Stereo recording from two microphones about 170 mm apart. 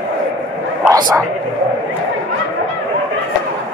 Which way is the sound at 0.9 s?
20° right (ahead or behind).